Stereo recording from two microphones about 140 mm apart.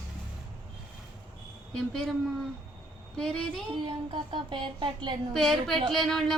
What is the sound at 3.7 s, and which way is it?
Music, 40° right (ahead or behind).